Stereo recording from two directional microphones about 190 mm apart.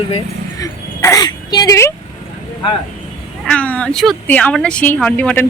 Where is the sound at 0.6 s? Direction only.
20° left (ahead or behind).